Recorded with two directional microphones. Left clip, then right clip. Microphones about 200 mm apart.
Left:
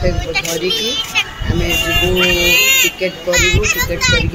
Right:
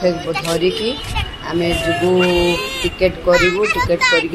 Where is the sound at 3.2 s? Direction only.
45° right (ahead or behind).